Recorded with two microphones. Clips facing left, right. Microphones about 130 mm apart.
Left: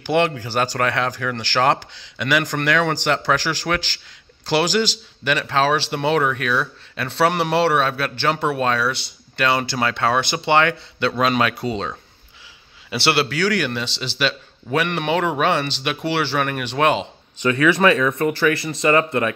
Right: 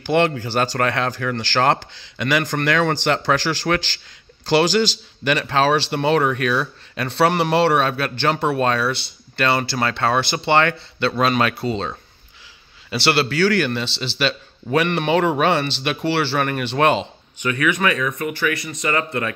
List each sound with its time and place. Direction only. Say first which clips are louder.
0.0 s speech: right 1 dB; 5° left (ahead or behind)
12.9 s speech: right 1 dB; 15° left (ahead or behind)
17.4 s speech: left 4 dB; 30° left (ahead or behind)